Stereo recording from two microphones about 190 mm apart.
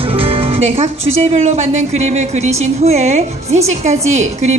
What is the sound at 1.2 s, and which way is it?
A woman's voice, 35° right (ahead or behind).